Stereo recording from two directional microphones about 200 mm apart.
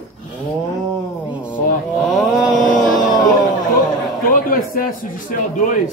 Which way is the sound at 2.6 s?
40° left (ahead or behind).